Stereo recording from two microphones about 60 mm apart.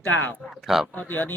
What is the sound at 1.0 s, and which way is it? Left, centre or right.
Speech, left.